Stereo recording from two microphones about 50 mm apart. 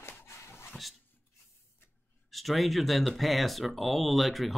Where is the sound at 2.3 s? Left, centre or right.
Centre.